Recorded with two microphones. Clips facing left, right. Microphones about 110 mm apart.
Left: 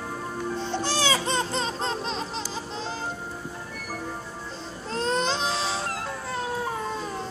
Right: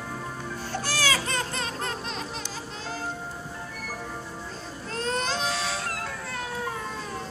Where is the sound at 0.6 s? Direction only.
20° left (ahead or behind).